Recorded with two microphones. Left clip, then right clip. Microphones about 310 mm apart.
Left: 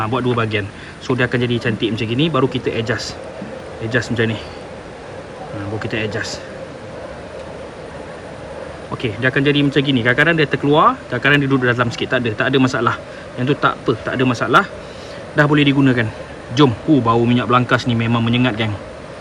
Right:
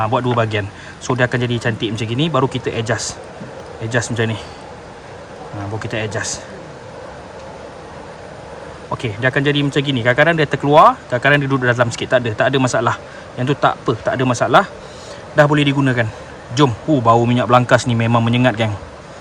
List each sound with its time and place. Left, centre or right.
0.0 s speech: right
5.8 s speech: right
9.0 s speech: right